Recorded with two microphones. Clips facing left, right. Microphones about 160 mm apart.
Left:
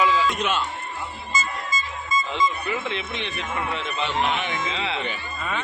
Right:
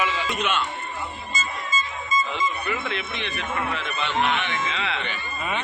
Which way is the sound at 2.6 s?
25° left (ahead or behind).